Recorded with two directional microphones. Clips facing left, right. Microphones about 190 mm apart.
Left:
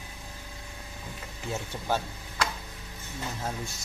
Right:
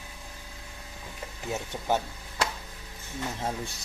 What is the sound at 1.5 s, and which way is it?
Speech, 20° right (ahead or behind).